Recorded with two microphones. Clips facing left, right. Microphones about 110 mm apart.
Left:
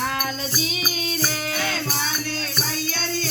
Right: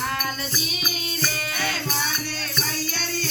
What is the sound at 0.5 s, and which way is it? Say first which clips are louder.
Music: left 3 dB; 30° left (ahead or behind).